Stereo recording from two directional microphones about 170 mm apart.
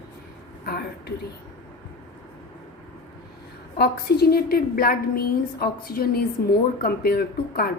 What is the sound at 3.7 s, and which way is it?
A woman's voice, 65° left (ahead or behind).